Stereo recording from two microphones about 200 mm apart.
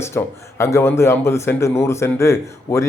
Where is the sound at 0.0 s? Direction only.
10° left (ahead or behind).